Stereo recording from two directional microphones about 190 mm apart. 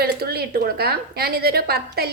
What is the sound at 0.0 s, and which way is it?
A woman's voice, 55° right (ahead or behind).